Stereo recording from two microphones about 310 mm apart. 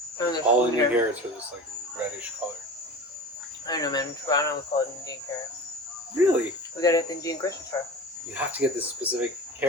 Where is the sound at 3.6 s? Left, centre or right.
Centre.